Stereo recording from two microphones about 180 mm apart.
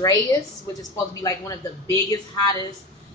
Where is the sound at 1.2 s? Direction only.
20° left (ahead or behind).